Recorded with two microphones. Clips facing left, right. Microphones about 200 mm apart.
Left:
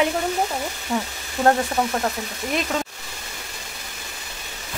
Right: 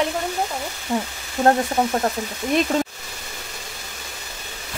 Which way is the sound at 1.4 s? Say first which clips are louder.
Right 1 dB; 25° right (ahead or behind).